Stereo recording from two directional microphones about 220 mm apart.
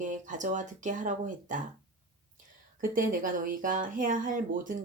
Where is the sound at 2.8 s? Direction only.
40° right (ahead or behind).